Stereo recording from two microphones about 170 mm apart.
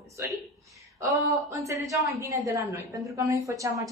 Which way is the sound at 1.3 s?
20° right (ahead or behind).